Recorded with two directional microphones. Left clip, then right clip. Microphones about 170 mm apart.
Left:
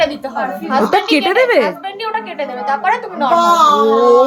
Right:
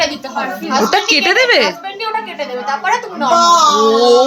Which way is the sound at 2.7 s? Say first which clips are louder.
Left 1 dB; 25° left (ahead or behind).